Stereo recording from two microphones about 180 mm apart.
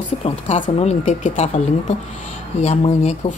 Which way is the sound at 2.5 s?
35° left (ahead or behind).